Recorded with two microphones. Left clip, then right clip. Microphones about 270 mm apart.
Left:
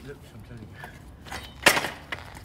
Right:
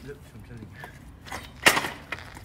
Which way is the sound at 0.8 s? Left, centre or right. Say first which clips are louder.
Left 1 dB; centre.